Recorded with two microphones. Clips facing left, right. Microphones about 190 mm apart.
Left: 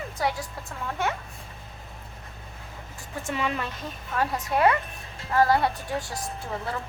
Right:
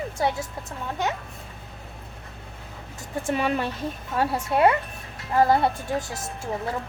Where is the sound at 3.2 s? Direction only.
50° right (ahead or behind).